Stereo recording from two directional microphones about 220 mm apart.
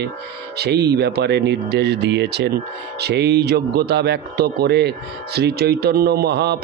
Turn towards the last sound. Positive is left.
turn(degrees=-50)  # may be behind; listen again after turning